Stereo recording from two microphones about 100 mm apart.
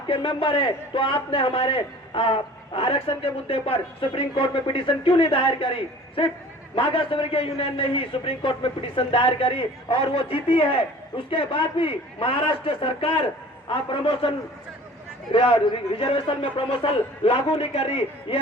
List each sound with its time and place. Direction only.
0.1 s a man's voice: 55° left (ahead or behind); by 13.2 s 75° left (ahead or behind)
13.7 s a man's voice: 60° left (ahead or behind)